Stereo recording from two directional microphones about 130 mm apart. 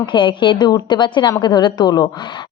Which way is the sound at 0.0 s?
35° left (ahead or behind).